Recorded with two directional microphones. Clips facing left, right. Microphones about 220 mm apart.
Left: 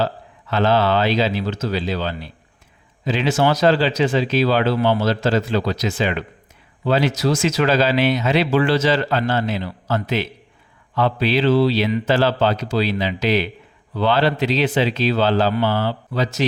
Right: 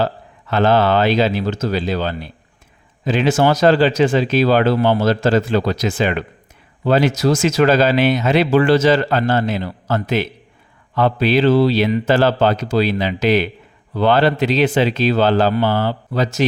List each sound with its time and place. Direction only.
0.0 s speech: 50° right (ahead or behind)